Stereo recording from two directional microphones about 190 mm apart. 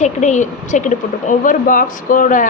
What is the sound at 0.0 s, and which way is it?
A woman's voice, 40° left (ahead or behind).